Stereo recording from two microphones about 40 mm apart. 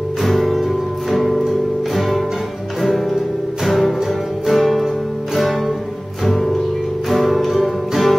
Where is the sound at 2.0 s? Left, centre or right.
Centre.